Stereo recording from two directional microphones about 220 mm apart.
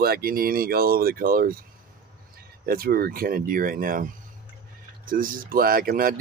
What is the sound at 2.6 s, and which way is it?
Speech, 45° right (ahead or behind).